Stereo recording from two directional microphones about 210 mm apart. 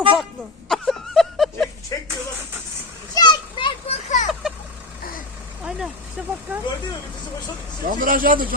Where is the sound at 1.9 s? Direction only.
15° left (ahead or behind).